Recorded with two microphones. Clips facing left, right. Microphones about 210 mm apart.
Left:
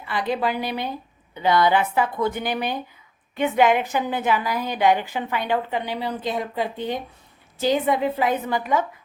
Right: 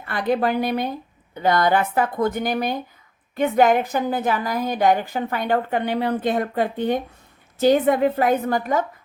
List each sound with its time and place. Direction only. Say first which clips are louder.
0.0 s a woman's voice: right 3 dB; 50° right (ahead or behind)